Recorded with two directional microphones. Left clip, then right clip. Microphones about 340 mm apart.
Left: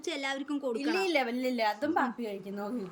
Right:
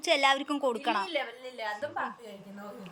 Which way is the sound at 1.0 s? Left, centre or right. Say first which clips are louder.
Left 5 dB; left.